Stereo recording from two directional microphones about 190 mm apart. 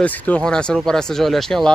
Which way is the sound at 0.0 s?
10° left (ahead or behind).